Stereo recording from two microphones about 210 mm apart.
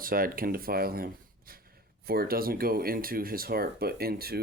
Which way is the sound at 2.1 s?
45° right (ahead or behind).